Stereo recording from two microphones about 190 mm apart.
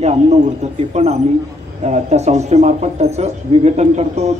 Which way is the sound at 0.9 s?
35° right (ahead or behind).